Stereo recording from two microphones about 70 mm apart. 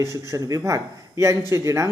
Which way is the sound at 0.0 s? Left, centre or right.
Right.